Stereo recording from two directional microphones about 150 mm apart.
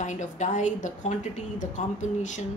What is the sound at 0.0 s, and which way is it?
A woman's voice, 55° left (ahead or behind).